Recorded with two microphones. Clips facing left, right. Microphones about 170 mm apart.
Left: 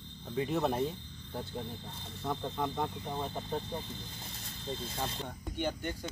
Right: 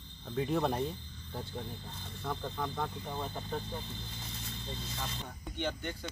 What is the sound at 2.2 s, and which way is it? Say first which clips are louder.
Speech: left 3 dB; 20° left (ahead or behind).